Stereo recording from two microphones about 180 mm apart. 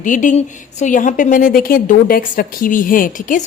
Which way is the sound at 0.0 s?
45° left (ahead or behind).